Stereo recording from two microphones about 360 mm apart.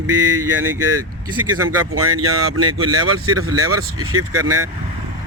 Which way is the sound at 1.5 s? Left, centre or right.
Right.